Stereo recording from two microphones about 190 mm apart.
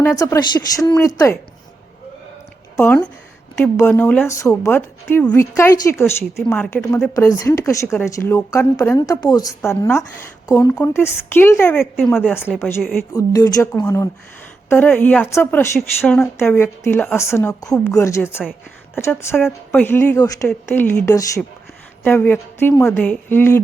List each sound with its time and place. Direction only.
0.0 s a woman's voice: 10° left (ahead or behind)
2.7 s a woman's voice: 10° left (ahead or behind)
13.1 s a woman's voice: 20° left (ahead or behind)